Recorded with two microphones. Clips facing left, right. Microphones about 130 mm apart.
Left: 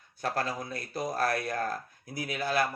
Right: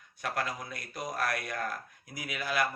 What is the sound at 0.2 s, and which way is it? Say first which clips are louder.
A man's voice: left 3 dB; 30° left (ahead or behind).